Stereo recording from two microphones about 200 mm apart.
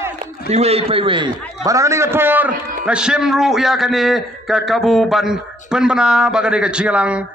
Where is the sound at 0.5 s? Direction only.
30° right (ahead or behind).